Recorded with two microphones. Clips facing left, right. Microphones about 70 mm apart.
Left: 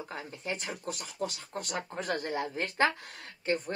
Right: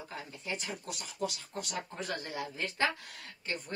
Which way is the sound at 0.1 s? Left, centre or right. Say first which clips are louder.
Left 1 dB; left.